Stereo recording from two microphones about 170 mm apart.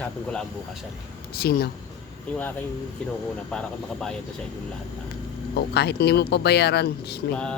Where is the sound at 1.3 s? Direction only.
65° left (ahead or behind).